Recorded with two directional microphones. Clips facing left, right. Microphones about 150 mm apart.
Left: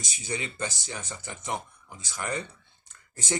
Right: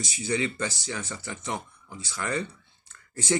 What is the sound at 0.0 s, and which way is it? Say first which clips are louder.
Speech: right 7 dB; 20° left (ahead or behind).